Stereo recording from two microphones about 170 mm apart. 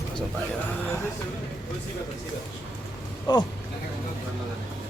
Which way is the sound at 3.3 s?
25° left (ahead or behind).